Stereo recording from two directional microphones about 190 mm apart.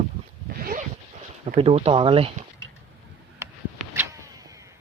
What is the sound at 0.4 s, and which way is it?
Zipper, 50° right (ahead or behind).